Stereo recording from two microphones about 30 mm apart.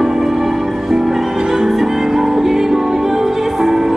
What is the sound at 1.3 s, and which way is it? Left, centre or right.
Music, right.